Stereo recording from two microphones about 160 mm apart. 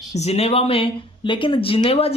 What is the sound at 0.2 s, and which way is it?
Speech, 40° left (ahead or behind).